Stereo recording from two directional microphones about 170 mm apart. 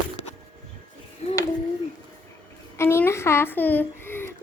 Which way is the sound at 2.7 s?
15° left (ahead or behind).